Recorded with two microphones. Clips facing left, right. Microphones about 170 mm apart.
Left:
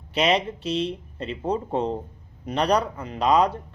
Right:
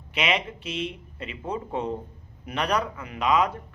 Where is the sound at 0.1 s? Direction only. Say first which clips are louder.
Left 5 dB; 35° left (ahead or behind).